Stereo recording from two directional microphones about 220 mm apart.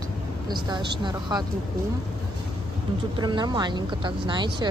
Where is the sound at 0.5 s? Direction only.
20° right (ahead or behind).